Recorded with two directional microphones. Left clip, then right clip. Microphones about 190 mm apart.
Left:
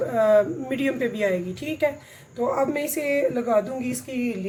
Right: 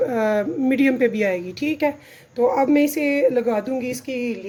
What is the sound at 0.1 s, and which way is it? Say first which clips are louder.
Speech: left 2 dB; 50° right (ahead or behind).